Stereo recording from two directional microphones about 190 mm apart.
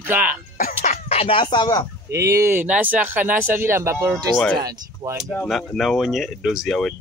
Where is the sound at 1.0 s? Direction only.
30° left (ahead or behind).